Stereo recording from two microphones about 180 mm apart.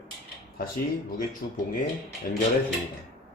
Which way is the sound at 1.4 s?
60° left (ahead or behind).